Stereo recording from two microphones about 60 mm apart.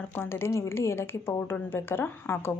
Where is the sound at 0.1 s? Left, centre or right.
Left.